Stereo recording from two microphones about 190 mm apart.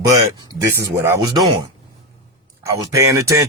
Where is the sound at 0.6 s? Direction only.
10° right (ahead or behind).